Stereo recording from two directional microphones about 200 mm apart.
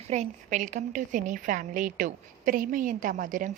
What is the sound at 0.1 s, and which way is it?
A woman's voice, 35° right (ahead or behind).